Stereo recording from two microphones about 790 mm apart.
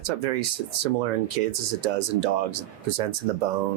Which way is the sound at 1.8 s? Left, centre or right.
Right.